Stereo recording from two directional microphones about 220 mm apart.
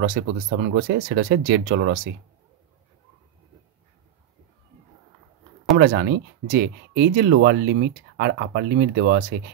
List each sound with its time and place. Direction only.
0.0 s speech: 45° right (ahead or behind)
5.8 s speech: 50° right (ahead or behind)